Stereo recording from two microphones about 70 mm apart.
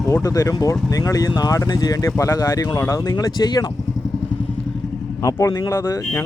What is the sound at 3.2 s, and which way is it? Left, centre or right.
Speech, left.